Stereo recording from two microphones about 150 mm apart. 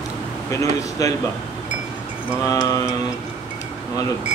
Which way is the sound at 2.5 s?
25° left (ahead or behind).